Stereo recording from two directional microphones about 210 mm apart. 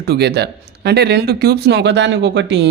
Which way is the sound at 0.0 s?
50° right (ahead or behind).